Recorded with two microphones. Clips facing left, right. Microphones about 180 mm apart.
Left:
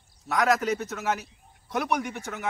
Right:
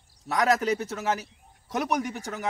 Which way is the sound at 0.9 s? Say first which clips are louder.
Right 1 dB; 30° right (ahead or behind).